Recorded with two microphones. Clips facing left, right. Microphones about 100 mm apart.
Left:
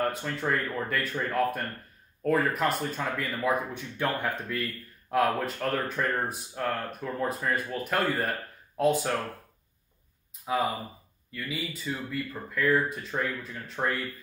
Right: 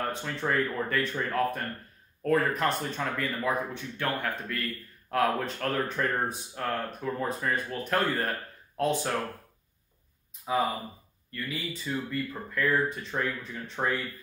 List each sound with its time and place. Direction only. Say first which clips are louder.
0.0 s speech: left 2 dB; centre (ahead or behind)
3.4 s speech: left 5 dB; 15° left (ahead or behind)
5.1 s speech: left 1 dB; 5° left (ahead or behind)
10.4 s speech: even; centre (ahead or behind)